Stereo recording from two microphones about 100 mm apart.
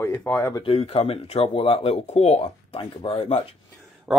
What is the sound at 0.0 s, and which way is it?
Speech, 25° left (ahead or behind).